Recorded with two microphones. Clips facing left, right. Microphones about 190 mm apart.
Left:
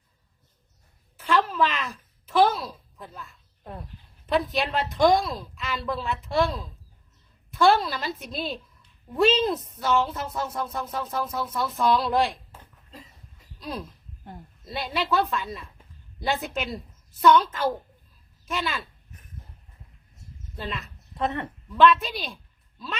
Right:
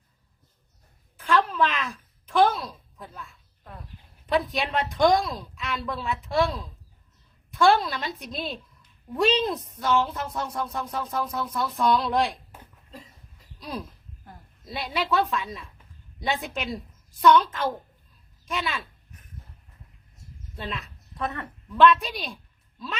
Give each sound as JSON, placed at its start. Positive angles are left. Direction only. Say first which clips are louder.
{"t": 1.1, "sound": "a sound", "louder": "even", "side_deg": 5}
{"t": 4.3, "sound": "speech", "louder": "left 1 dB", "side_deg": 0}
{"t": 12.5, "sound": "a sound", "louder": "right 2 dB", "side_deg": 0}
{"t": 13.6, "sound": "speech", "louder": "even", "side_deg": 0}
{"t": 20.6, "sound": "speech", "louder": "left 1 dB", "side_deg": 0}
{"t": 21.2, "sound": "speech", "louder": "left 4 dB", "side_deg": 25}
{"t": 21.8, "sound": "speech", "louder": "even", "side_deg": 0}